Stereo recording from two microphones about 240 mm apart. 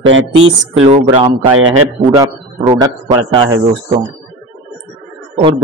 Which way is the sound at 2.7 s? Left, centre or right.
Centre.